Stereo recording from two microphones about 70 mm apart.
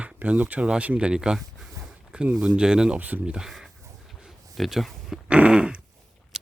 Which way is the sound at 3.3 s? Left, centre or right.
Centre.